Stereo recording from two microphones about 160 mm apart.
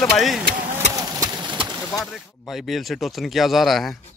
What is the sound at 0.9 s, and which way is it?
Engine, 20° right (ahead or behind).